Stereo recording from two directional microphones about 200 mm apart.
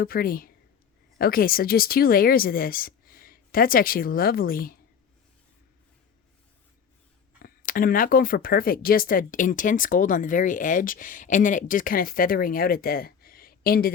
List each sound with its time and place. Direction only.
0.0 s speech: 50° left (ahead or behind)
7.4 s speech: 45° left (ahead or behind)